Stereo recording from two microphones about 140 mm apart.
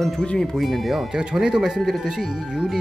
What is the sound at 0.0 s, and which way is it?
Speech, 5° left (ahead or behind).